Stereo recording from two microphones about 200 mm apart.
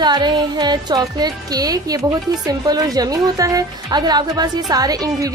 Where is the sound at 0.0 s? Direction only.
20° right (ahead or behind).